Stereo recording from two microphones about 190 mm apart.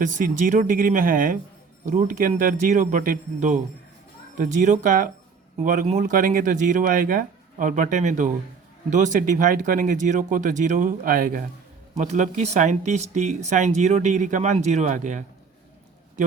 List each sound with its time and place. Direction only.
0.0 s speech: 40° right (ahead or behind)